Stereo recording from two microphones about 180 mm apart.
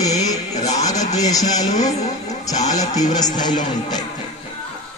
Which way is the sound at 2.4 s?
20° left (ahead or behind).